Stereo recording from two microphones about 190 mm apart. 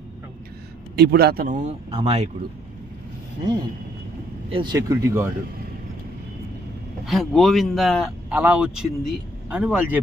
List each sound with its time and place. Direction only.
0.9 s speech: 55° right (ahead or behind); by 2.2 s 30° right (ahead or behind)
4.5 s speech: 25° right (ahead or behind)
7.1 s speech: centre (ahead or behind)